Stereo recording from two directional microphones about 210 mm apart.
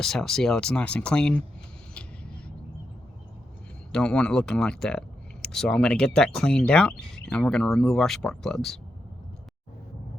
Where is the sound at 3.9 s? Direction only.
5° left (ahead or behind).